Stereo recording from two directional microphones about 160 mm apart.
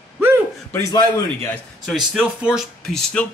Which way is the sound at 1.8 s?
5° right (ahead or behind).